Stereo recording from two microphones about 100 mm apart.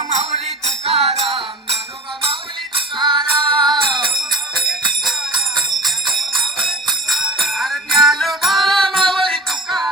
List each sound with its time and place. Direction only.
0.1 s music: 90° right
1.2 s music: centre (ahead or behind)
2.2 s music: 65° right (ahead or behind)
5.5 s music: 50° right (ahead or behind)
7.1 s a sound: 5° right (ahead or behind)
7.4 s music: centre (ahead or behind)